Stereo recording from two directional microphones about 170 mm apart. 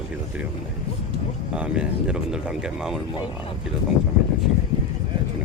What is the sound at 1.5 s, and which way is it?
Speech, 5° right (ahead or behind).